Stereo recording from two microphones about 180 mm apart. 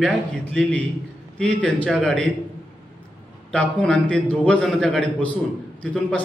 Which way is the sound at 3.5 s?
5° left (ahead or behind).